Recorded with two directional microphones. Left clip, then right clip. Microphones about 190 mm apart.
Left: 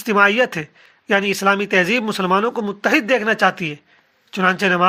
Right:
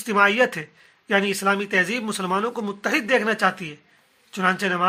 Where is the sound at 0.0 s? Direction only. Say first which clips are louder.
Left 3 dB; 25° left (ahead or behind).